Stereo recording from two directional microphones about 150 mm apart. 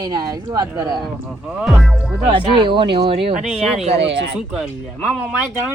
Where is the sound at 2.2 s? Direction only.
30° right (ahead or behind).